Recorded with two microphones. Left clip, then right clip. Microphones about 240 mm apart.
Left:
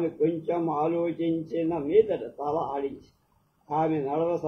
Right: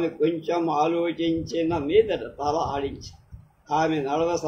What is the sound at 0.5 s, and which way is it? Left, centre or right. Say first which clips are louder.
A man's voice: right 4 dB; right.